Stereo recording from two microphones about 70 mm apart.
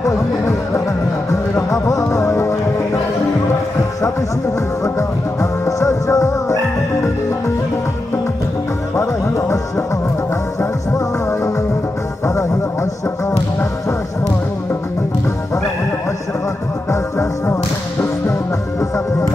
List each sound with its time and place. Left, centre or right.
1.7 s music: left
4.8 s music: left
8.9 s music: left
16.9 s music: left